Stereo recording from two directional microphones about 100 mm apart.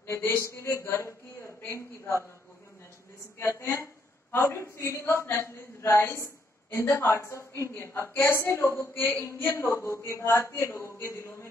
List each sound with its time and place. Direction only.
0.0 s a man's voice: 25° left (ahead or behind)
3.3 s a woman's voice: 25° left (ahead or behind)